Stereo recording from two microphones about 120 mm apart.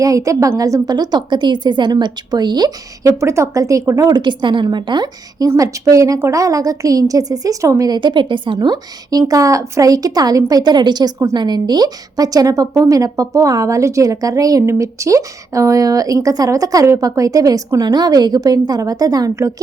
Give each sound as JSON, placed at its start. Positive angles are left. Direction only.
{"t": 0.0, "sound": "a woman's voice", "side_deg": -30}
{"t": 5.5, "sound": "a woman's voice", "side_deg": -30}